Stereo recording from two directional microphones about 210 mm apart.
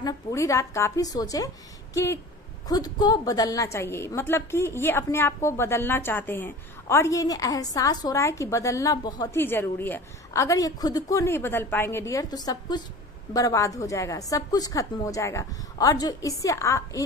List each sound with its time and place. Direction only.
0.0 s a woman's voice: 15° left (ahead or behind)
2.7 s a woman's voice: 20° left (ahead or behind)